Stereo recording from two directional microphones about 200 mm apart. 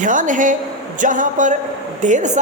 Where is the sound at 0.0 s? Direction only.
40° right (ahead or behind).